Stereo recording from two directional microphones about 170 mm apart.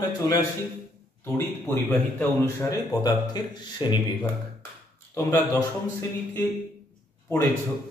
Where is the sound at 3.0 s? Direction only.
25° left (ahead or behind).